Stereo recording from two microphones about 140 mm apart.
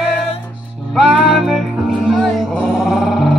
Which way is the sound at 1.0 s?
5° right (ahead or behind).